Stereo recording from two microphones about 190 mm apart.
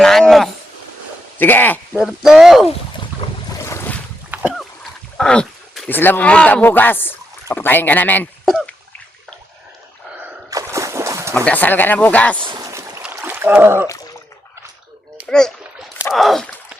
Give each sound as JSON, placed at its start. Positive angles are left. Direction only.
{"t": 0.0, "sound": "a sound", "side_deg": 0}
{"t": 1.4, "sound": "speech", "side_deg": 10}
{"t": 2.0, "sound": "speech", "side_deg": 0}
{"t": 3.6, "sound": "boat", "side_deg": 15}
{"t": 4.3, "sound": "boat", "side_deg": -5}
{"t": 4.8, "sound": "speech", "side_deg": 5}
{"t": 8.4, "sound": "a sound", "side_deg": 0}
{"t": 10.2, "sound": "gasp", "side_deg": -10}
{"t": 11.3, "sound": "speech", "side_deg": 10}
{"t": 12.4, "sound": "boat", "side_deg": -20}
{"t": 13.1, "sound": "a sound", "side_deg": -10}
{"t": 15.2, "sound": "rowboat", "side_deg": 5}
{"t": 16.1, "sound": "a sound", "side_deg": 0}